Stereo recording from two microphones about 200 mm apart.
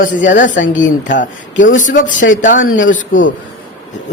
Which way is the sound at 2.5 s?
70° left (ahead or behind).